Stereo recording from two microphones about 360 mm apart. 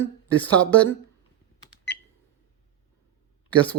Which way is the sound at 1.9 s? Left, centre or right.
Left.